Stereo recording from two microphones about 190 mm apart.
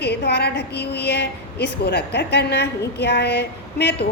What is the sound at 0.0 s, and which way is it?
A woman's voice, 60° left (ahead or behind).